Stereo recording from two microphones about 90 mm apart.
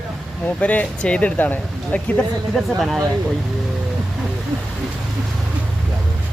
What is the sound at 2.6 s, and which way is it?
Speech, centre (ahead or behind).